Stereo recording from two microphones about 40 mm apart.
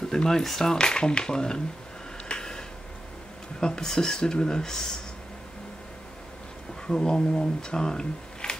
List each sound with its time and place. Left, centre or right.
0.1 s speech: centre
2.2 s a sound: centre
3.6 s speech: centre
6.9 s speech: centre